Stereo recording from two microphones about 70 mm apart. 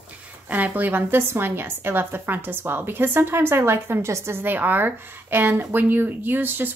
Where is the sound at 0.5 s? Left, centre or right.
Right.